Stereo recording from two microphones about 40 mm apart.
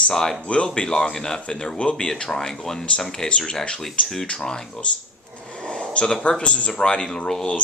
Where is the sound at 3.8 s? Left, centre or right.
Centre.